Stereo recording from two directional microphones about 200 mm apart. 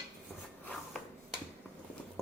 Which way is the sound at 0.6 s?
5° left (ahead or behind).